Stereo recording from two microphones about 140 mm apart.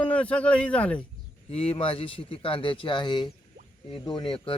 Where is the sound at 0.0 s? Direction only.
10° left (ahead or behind).